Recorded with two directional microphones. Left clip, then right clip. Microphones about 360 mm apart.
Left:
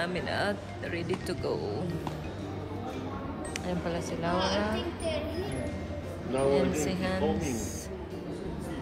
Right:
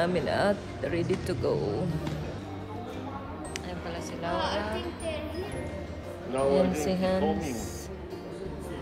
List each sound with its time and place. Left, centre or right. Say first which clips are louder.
0.0 s speech: right 4 dB; centre
3.6 s speech: left 3 dB; centre
6.3 s speech: right 2 dB; centre